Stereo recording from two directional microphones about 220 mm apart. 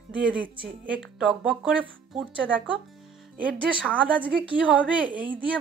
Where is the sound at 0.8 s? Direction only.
5° right (ahead or behind).